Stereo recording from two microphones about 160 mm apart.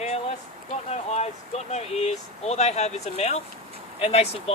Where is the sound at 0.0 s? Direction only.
40° left (ahead or behind).